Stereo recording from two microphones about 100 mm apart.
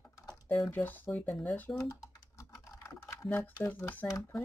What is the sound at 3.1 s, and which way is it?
Speech, 25° left (ahead or behind).